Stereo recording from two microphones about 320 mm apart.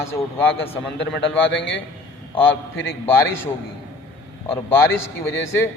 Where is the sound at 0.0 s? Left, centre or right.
Centre.